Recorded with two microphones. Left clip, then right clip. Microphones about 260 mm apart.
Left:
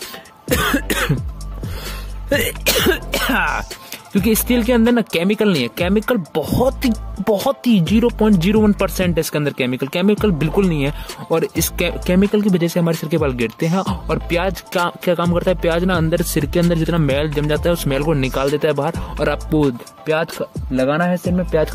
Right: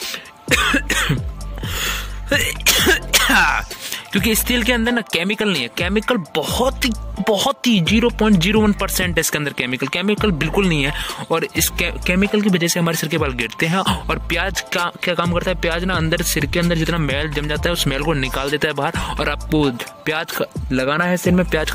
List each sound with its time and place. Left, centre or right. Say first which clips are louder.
0.5 s cough: right 2 dB; centre
0.9 s music: right 1 dB; centre
1.8 s speech: right 11 dB; centre
7.6 s speech: even; centre
8.5 s speech: left 1 dB; centre
12.6 s speech: even; centre
14.7 s speech: left 2 dB; centre
20.3 s speech: even; centre